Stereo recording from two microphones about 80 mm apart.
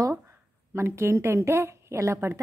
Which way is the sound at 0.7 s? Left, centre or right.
Right.